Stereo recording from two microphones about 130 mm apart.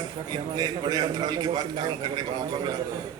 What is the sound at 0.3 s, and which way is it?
A man's voice, 30° right (ahead or behind).